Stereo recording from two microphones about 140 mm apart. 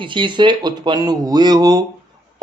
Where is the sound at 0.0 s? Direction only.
35° right (ahead or behind).